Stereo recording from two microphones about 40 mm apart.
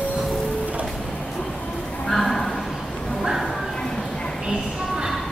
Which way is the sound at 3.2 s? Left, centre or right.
Centre.